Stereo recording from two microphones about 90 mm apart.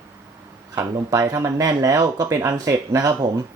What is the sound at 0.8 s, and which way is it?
Speech, 40° right (ahead or behind).